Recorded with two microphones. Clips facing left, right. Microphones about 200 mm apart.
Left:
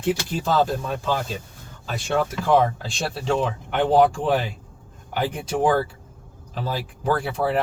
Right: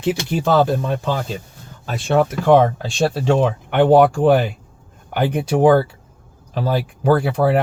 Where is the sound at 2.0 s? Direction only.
60° right (ahead or behind).